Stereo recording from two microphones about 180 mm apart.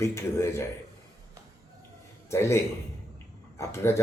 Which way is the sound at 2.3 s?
15° left (ahead or behind).